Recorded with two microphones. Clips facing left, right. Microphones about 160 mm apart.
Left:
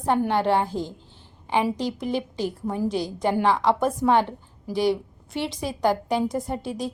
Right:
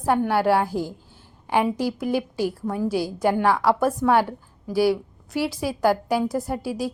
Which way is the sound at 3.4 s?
15° left (ahead or behind).